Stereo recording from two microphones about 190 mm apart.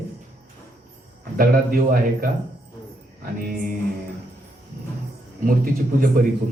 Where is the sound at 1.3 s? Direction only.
50° right (ahead or behind).